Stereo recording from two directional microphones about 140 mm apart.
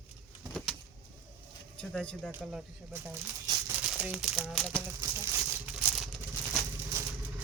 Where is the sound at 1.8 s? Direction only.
5° left (ahead or behind).